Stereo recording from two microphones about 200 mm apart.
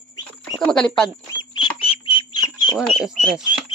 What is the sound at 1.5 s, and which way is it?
Bird, 25° left (ahead or behind).